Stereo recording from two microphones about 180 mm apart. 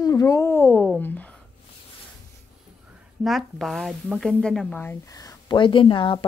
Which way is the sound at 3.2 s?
Centre (ahead or behind).